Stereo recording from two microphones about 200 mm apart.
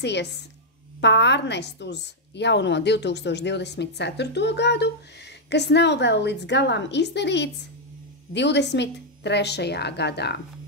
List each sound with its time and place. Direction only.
0.0 s a woman's voice: 60° left (ahead or behind)